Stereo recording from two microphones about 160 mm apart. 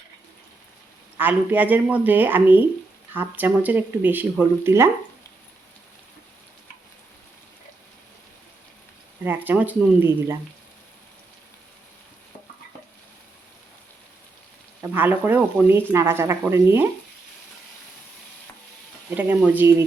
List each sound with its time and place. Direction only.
1.2 s speech: 10° right (ahead or behind)
9.2 s speech: 15° right (ahead or behind)
14.8 s speech: 10° right (ahead or behind)
19.1 s speech: 10° right (ahead or behind)